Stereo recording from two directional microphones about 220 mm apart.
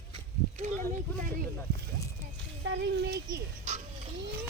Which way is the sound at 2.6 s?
55° right (ahead or behind).